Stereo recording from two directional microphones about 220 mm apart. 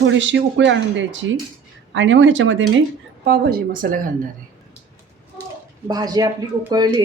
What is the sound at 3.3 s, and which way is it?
Speech, 45° right (ahead or behind).